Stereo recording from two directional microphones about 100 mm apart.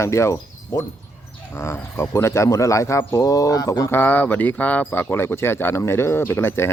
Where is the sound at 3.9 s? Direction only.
20° left (ahead or behind).